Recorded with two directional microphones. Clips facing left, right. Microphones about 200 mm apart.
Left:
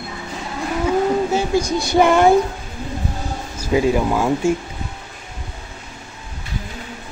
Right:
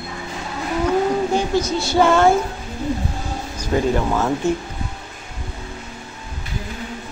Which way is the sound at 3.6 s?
10° left (ahead or behind).